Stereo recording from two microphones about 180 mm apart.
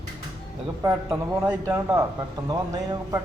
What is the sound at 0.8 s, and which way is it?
Speech, 15° right (ahead or behind).